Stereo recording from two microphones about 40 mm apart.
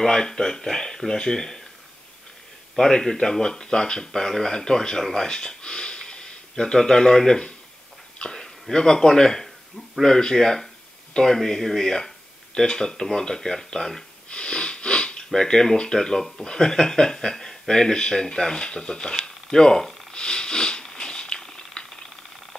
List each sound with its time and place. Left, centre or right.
0.0 s speech: centre
2.7 s speech: centre
8.2 s a sound: centre
8.7 s speech: centre
14.3 s speech: left
20.1 s a sound: left